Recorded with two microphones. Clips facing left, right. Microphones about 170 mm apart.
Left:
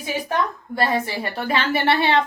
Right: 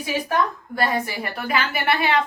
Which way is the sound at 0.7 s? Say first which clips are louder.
Left 2 dB; 30° left (ahead or behind).